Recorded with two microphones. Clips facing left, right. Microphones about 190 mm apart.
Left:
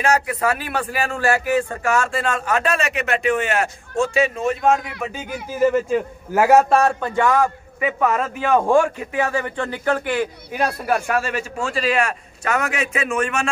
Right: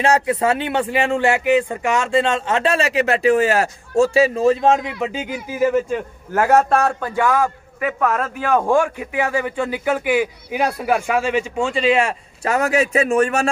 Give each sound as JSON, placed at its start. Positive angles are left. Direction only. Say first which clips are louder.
{"t": 0.0, "sound": "a man's voice", "louder": "right 3 dB", "side_deg": -25}
{"t": 5.9, "sound": "a man's voice", "louder": "left 3 dB", "side_deg": 10}
{"t": 8.7, "sound": "a man's voice", "louder": "left 1 dB", "side_deg": -10}